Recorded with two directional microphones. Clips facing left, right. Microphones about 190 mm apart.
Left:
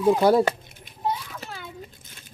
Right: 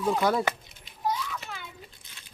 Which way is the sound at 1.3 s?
40° left (ahead or behind).